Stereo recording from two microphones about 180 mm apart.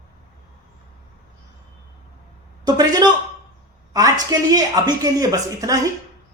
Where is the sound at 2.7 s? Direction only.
20° right (ahead or behind).